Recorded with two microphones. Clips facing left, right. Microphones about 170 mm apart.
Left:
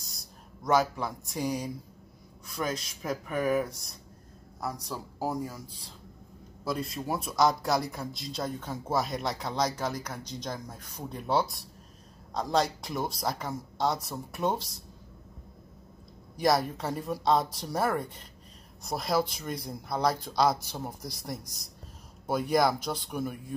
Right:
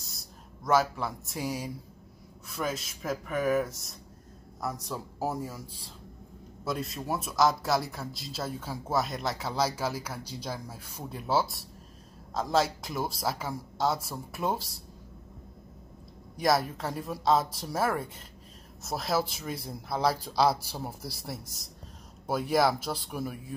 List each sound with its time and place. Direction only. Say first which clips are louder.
0.0 s a man's voice: right 1 dB; centre (ahead or behind)
6.6 s a man's voice: left 1 dB; centre (ahead or behind)
16.3 s a man's voice: left 1 dB; centre (ahead or behind)